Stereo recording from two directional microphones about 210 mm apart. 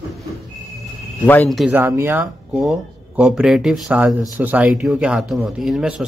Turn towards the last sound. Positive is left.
turn(degrees=-5)  # may be behind; listen again after turning